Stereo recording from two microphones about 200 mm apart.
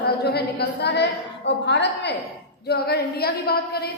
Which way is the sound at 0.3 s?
55° left (ahead or behind).